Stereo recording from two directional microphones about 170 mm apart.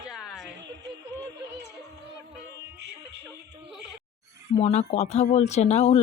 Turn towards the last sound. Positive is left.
turn(degrees=40)  # may be behind; listen again after turning